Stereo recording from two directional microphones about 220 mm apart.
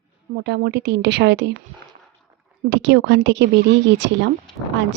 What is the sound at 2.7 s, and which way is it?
Speech, 55° right (ahead or behind).